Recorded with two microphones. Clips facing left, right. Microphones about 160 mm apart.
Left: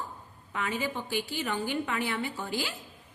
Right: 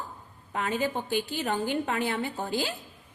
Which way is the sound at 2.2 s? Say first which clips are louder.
Right 3 dB; 50° right (ahead or behind).